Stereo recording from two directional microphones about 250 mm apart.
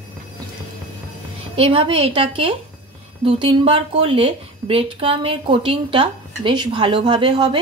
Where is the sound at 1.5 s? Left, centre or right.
Right.